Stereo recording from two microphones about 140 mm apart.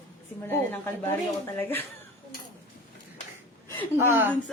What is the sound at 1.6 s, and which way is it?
Speech, 15° left (ahead or behind).